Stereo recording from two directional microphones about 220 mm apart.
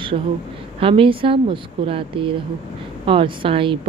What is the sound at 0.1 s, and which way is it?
Speech, 25° right (ahead or behind).